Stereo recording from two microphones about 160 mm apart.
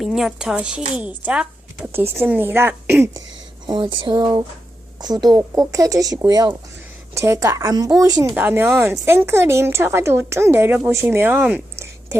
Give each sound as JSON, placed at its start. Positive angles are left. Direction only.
{"t": 0.0, "sound": "speech", "side_deg": 0}
{"t": 3.7, "sound": "a woman's voice", "side_deg": -30}